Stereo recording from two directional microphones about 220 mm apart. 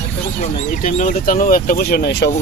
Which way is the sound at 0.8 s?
35° left (ahead or behind).